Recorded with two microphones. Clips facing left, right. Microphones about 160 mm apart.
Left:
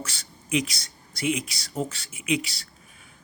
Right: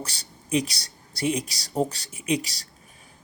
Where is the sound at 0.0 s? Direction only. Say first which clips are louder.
Right 1 dB; 35° right (ahead or behind).